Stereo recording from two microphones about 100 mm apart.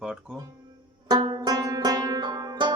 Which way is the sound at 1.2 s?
50° right (ahead or behind).